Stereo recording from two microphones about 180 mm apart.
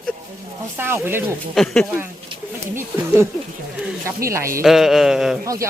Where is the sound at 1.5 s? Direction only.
5° left (ahead or behind).